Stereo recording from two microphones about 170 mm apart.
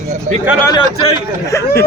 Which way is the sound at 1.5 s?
15° left (ahead or behind).